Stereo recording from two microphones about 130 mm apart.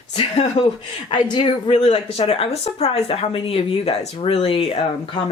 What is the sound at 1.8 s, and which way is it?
Speech, 50° left (ahead or behind).